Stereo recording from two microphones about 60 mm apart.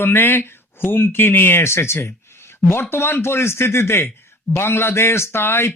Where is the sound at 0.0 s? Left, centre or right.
Left.